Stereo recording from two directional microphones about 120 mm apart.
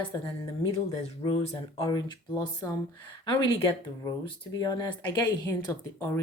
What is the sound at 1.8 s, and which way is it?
Speech, 35° left (ahead or behind).